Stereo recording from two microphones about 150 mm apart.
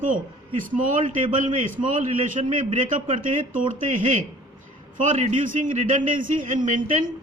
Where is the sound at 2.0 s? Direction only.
40° right (ahead or behind).